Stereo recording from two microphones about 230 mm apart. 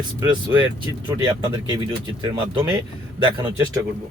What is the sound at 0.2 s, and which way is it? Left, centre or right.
Speech, centre.